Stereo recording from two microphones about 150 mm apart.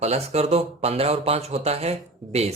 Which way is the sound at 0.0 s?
45° right (ahead or behind).